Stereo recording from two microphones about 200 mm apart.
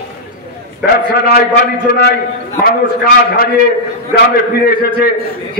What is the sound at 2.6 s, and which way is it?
A man's voice, 50° left (ahead or behind).